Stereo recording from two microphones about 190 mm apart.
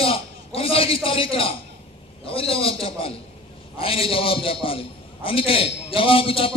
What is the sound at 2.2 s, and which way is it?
A man's voice, 30° left (ahead or behind).